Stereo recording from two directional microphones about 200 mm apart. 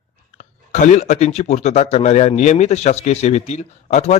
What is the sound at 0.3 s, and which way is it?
Speech, 35° left (ahead or behind).